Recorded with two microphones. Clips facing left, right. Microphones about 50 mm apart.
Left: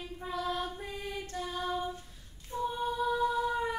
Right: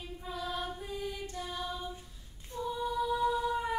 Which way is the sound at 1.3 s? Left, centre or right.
Left.